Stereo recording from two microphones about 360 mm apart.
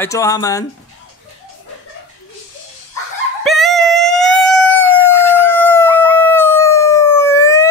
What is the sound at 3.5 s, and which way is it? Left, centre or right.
Howl, centre.